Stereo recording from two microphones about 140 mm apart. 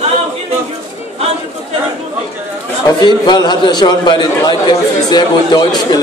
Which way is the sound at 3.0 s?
30° left (ahead or behind).